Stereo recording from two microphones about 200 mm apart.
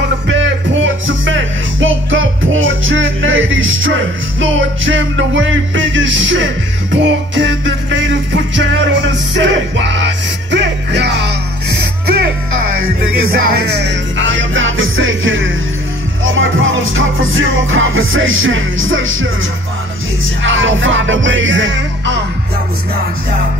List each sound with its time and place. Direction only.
0.3 s music: 70° right (ahead or behind)
13.0 s music: 50° right (ahead or behind); by 19.2 s 80° right
20.4 s music: 75° right (ahead or behind)